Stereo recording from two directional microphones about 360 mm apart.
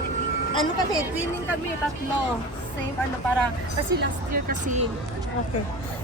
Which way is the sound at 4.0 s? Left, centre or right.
Right.